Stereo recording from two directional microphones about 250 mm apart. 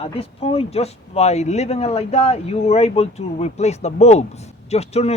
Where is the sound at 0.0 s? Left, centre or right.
Left.